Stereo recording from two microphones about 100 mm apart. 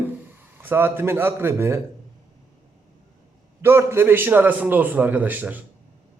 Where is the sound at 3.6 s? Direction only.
25° right (ahead or behind).